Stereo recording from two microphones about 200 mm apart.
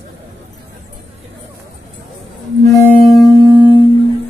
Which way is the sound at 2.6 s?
10° left (ahead or behind).